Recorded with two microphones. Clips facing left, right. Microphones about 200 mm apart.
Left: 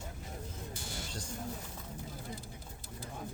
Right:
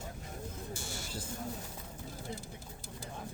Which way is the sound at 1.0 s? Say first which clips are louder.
Right 1 dB; 5° right (ahead or behind).